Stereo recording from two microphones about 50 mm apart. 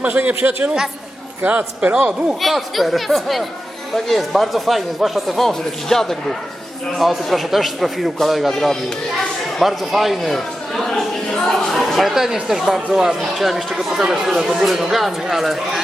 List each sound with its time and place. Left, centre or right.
0.0 s a man's voice: right
2.4 s speech: centre
8.5 s a child's voice: centre
9.6 s a man's voice: centre